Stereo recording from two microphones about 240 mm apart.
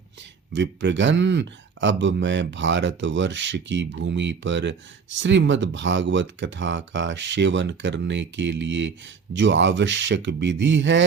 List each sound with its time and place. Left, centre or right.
0.2 s speech: right